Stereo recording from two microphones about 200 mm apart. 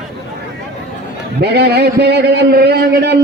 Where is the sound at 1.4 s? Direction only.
55° right (ahead or behind).